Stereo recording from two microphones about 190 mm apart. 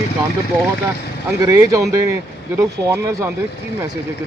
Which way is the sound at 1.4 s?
15° right (ahead or behind).